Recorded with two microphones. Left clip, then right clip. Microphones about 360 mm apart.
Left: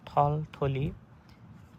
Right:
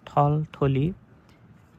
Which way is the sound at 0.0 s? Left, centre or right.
Centre.